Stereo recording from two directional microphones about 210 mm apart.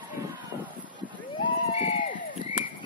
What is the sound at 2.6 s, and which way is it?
Horse, 40° left (ahead or behind).